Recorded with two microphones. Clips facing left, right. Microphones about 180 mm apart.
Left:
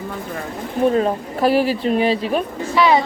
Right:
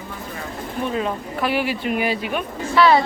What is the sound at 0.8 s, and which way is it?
Speech, 40° left (ahead or behind).